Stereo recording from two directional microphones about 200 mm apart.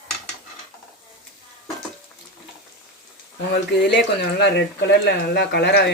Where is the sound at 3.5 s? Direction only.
60° left (ahead or behind).